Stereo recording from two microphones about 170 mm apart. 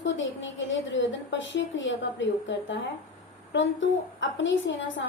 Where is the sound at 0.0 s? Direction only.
90° left.